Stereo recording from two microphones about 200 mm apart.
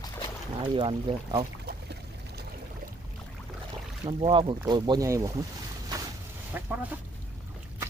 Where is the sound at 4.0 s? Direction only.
25° right (ahead or behind).